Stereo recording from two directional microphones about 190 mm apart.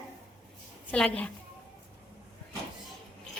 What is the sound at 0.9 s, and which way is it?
Speech, 5° left (ahead or behind).